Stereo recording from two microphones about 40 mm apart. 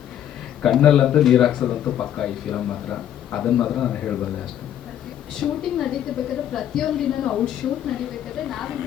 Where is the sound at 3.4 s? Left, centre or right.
Centre.